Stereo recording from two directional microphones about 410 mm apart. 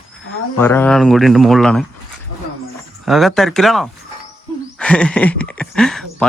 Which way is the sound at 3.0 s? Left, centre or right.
Centre.